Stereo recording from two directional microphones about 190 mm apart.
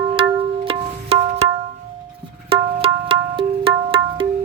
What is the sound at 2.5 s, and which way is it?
Music, 30° right (ahead or behind).